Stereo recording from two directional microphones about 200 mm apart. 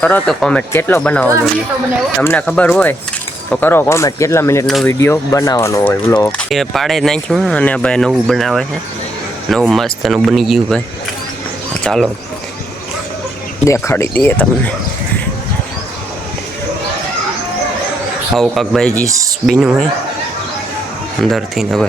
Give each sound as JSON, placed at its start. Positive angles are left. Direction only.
{"t": 0.0, "sound": "speech", "side_deg": 5}
{"t": 6.5, "sound": "speech", "side_deg": 0}
{"t": 13.7, "sound": "speech", "side_deg": 10}
{"t": 18.3, "sound": "speech", "side_deg": 0}
{"t": 19.0, "sound": "speech", "side_deg": -15}
{"t": 19.5, "sound": "speech", "side_deg": -5}
{"t": 21.2, "sound": "speech", "side_deg": 0}